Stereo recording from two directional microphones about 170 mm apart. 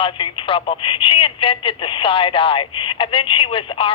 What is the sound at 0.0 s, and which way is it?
Speech, 30° left (ahead or behind).